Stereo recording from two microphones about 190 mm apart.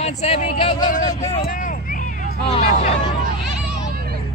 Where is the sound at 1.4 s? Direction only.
45° left (ahead or behind).